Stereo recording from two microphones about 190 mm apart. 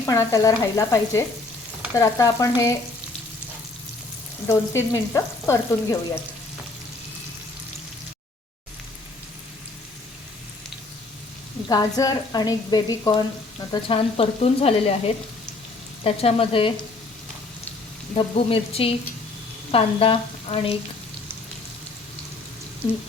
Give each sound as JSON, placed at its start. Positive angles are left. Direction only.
{"t": 0.0, "sound": "frying", "side_deg": 15}
{"t": 4.4, "sound": "frying", "side_deg": 15}
{"t": 11.7, "sound": "speech", "side_deg": 20}
{"t": 18.1, "sound": "speech", "side_deg": 30}